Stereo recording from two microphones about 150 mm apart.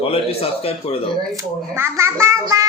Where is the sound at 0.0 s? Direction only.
40° left (ahead or behind).